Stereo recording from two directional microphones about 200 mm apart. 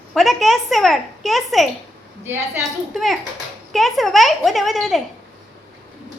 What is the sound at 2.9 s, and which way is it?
A woman's voice, centre (ahead or behind).